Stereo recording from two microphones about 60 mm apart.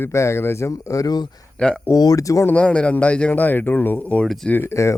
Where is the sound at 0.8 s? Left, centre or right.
Left.